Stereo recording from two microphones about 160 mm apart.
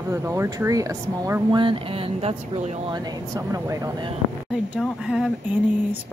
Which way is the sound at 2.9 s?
25° right (ahead or behind).